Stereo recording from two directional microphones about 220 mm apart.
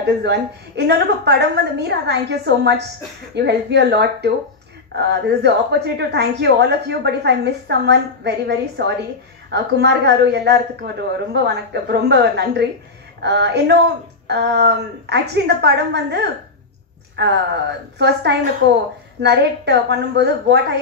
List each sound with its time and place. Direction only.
0.0 s a woman's voice: 50° right (ahead or behind)